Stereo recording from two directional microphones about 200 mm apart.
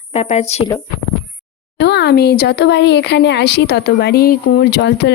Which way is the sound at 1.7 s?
55° left (ahead or behind).